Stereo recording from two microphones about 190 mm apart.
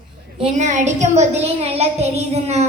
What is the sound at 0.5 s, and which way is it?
A child's voice, 40° right (ahead or behind).